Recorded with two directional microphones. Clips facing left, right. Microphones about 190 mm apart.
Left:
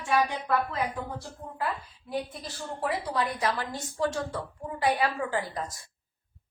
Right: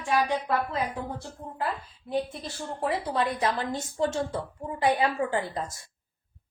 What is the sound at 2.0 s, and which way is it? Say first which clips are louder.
A woman's voice: right 4 dB; 25° right (ahead or behind).